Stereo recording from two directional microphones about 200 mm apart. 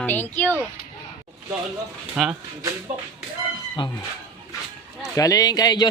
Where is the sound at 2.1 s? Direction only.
5° right (ahead or behind).